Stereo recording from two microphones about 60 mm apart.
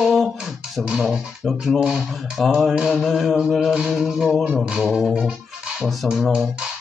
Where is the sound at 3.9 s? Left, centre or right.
Centre.